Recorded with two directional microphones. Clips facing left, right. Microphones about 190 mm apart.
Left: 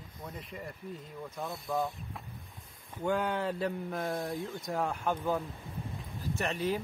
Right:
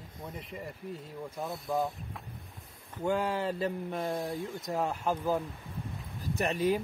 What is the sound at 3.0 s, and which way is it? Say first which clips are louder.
Speech: right 1 dB; 5° right (ahead or behind).